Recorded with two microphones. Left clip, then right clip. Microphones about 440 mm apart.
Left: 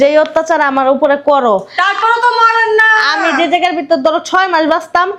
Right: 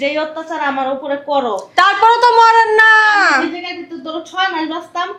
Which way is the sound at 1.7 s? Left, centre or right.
Right.